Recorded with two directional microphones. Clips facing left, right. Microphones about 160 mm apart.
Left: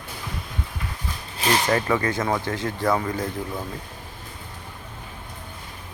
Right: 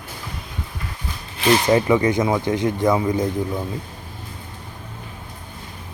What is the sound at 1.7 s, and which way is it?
Speech, 15° right (ahead or behind).